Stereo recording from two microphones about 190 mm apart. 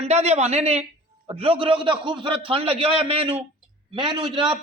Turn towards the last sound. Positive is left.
turn(degrees=-25)  # may be behind; listen again after turning